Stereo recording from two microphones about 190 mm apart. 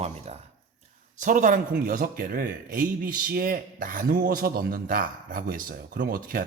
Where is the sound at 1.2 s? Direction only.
40° right (ahead or behind).